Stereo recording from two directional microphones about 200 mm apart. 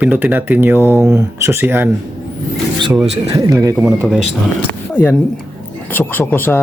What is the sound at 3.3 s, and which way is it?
Speech, 20° right (ahead or behind).